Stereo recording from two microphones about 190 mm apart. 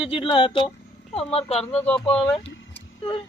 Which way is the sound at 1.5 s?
5° left (ahead or behind).